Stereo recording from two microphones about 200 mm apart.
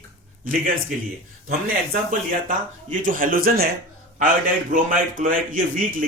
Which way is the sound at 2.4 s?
40° right (ahead or behind).